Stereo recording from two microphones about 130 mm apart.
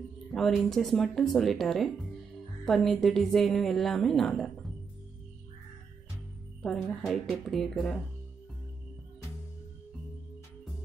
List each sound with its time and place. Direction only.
0.3 s a woman's voice: centre (ahead or behind)
6.6 s a woman's voice: 5° left (ahead or behind)